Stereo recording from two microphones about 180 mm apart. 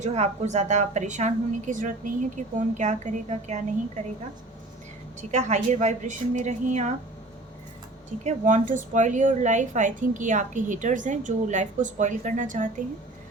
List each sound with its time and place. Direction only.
0.0 s a woman's voice: 40° right (ahead or behind)
5.3 s a woman's voice: 40° right (ahead or behind)
8.2 s a woman's voice: 40° right (ahead or behind)